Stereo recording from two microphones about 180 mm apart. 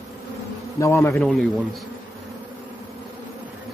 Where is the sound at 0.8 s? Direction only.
15° left (ahead or behind).